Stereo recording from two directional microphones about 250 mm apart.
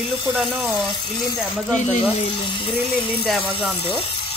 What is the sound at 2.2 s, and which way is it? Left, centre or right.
Speech, centre.